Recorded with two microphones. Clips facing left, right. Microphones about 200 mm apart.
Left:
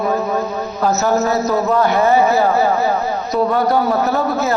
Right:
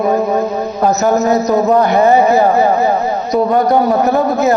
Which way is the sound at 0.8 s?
20° right (ahead or behind).